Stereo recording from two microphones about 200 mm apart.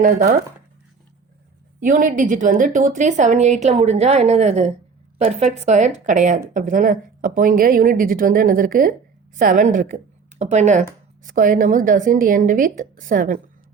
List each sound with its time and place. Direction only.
0.0 s a woman's voice: 40° right (ahead or behind)
1.8 s a woman's voice: 40° right (ahead or behind)